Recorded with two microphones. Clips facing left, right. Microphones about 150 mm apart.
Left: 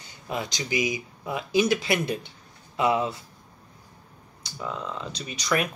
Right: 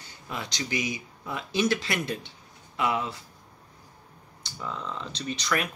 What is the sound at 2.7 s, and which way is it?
Speech, 25° left (ahead or behind).